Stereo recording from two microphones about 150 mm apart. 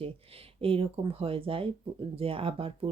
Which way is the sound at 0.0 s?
40° right (ahead or behind).